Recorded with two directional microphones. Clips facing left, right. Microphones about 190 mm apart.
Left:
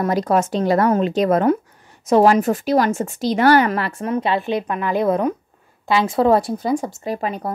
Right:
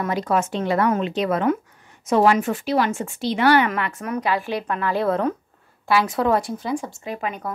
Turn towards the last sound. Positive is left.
turn(degrees=35)  # may be behind; listen again after turning